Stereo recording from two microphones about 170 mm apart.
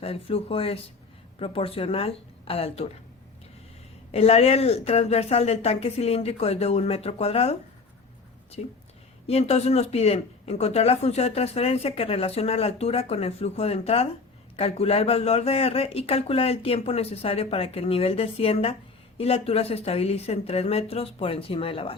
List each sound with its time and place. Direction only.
0.0 s speech: 35° left (ahead or behind)
4.1 s speech: 40° left (ahead or behind)
8.6 s speech: 40° left (ahead or behind)